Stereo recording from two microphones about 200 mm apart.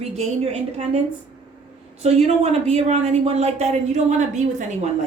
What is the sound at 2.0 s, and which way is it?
Speech, 30° right (ahead or behind).